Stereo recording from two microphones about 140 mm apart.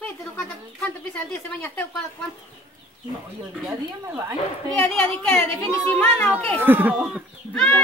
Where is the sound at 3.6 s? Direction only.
20° right (ahead or behind).